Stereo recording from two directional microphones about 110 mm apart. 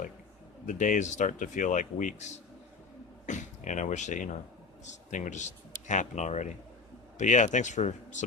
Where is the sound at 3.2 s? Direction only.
90° left.